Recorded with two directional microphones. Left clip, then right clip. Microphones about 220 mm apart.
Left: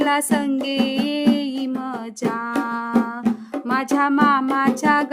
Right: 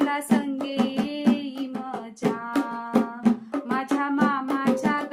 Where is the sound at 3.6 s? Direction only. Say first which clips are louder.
Left 7 dB; 50° left (ahead or behind).